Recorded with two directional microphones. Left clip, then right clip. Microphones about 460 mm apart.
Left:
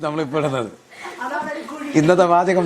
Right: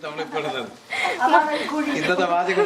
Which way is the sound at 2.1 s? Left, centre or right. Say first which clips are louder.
Left 7 dB; left.